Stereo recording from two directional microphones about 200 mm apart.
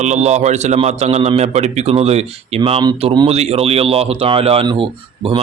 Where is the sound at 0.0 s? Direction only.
35° right (ahead or behind).